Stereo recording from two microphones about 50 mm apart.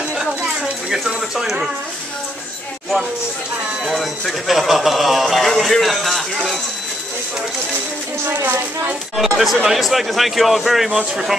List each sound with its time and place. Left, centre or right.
0.8 s a sound: centre
3.8 s speech: centre
8.3 s a woman's voice: right
9.1 s speech: centre